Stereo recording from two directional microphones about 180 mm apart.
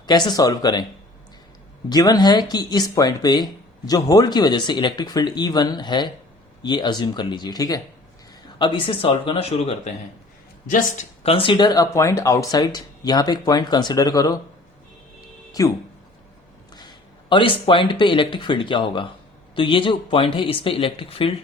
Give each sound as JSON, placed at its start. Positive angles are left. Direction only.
{"t": 0.0, "sound": "speech", "side_deg": 25}
{"t": 1.9, "sound": "speech", "side_deg": 20}
{"t": 10.7, "sound": "speech", "side_deg": 45}
{"t": 11.2, "sound": "speech", "side_deg": 30}
{"t": 15.6, "sound": "speech", "side_deg": 20}